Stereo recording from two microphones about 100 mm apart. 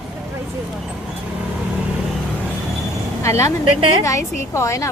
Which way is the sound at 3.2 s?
30° left (ahead or behind).